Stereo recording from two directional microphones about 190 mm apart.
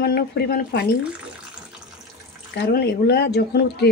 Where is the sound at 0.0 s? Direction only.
55° left (ahead or behind).